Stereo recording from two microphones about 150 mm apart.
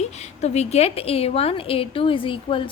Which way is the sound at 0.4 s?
45° left (ahead or behind).